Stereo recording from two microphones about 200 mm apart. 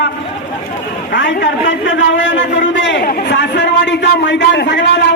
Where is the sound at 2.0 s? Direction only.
65° left (ahead or behind).